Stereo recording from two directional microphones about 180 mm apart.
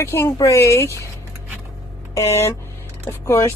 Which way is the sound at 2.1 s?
15° left (ahead or behind).